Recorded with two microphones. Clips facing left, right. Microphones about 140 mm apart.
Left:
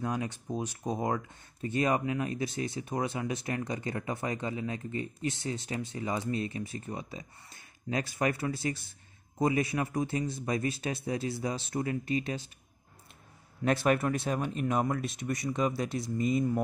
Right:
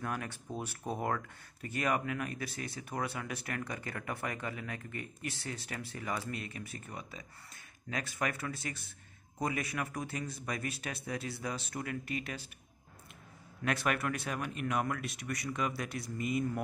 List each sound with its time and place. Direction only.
0.0 s speech: 20° left (ahead or behind)
13.7 s speech: 30° left (ahead or behind)